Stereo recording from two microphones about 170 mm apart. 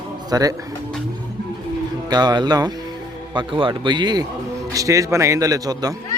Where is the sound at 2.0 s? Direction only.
25° right (ahead or behind).